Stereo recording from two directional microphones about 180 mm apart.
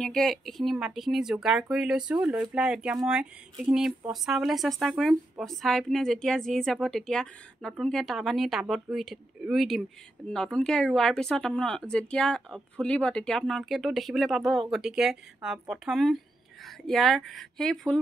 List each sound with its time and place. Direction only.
0.0 s speech: 5° left (ahead or behind)